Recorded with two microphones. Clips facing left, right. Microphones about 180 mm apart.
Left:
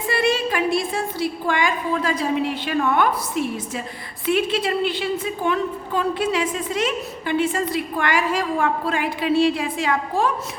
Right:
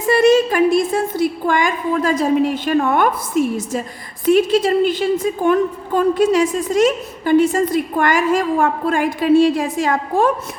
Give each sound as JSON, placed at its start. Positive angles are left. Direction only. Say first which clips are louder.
{"t": 0.0, "sound": "a woman's voice", "louder": "right 9 dB", "side_deg": -45}